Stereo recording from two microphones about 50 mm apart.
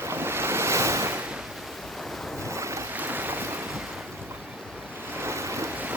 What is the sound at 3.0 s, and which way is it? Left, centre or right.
Boat, right.